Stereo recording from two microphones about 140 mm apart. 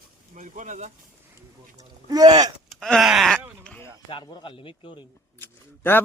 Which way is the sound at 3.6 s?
5° left (ahead or behind).